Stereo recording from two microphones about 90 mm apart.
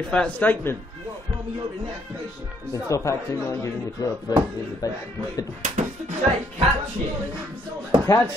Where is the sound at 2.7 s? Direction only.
35° left (ahead or behind).